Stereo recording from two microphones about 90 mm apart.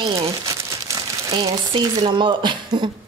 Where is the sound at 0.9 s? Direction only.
50° right (ahead or behind).